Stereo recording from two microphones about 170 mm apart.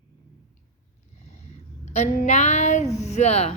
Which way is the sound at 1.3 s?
40° left (ahead or behind).